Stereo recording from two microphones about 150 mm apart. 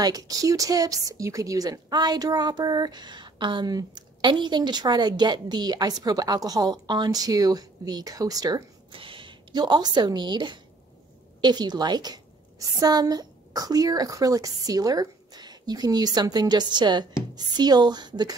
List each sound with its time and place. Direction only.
0.0 s speech: 25° right (ahead or behind)
8.9 s a woman's voice: 35° right (ahead or behind)